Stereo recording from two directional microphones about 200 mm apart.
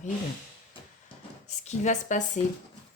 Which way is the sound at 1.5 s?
35° left (ahead or behind).